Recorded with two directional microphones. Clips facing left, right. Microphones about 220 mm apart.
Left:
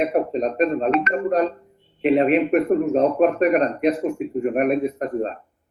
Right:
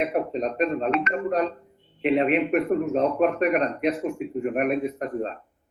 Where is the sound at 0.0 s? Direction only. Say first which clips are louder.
Left 4 dB; 40° left (ahead or behind).